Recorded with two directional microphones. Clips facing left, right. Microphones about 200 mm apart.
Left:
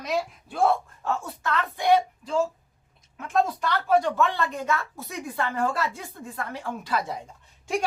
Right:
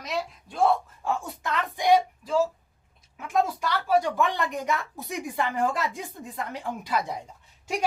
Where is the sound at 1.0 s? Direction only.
10° right (ahead or behind).